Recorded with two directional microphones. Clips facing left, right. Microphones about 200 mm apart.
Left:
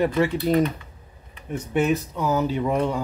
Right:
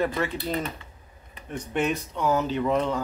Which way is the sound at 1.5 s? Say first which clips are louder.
Left 5 dB; 5° left (ahead or behind).